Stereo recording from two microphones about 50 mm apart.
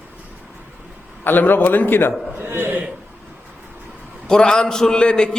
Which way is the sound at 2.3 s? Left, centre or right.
Right.